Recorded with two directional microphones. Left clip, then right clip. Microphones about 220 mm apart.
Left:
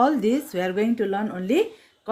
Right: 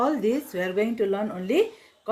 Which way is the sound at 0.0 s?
45° left (ahead or behind).